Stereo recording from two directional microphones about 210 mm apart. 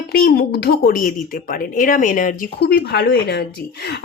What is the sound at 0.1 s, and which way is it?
Speech, 50° left (ahead or behind).